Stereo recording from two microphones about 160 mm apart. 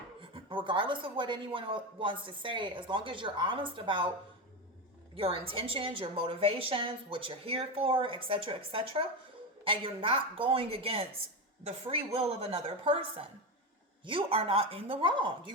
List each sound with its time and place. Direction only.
0.2 s speech: 30° right (ahead or behind)
5.1 s speech: 35° right (ahead or behind)